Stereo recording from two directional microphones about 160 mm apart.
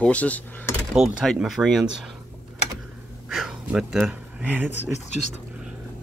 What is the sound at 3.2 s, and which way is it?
Speech, 5° right (ahead or behind).